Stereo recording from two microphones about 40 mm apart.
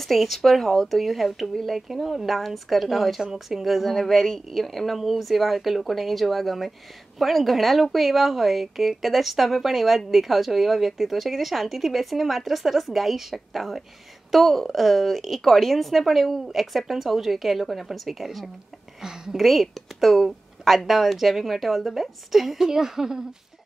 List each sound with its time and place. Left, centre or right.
0.0 s a woman's voice: centre
18.9 s a woman's voice: centre
19.3 s a woman's voice: centre